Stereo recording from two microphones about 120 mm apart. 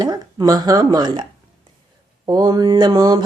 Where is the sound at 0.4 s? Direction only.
35° right (ahead or behind).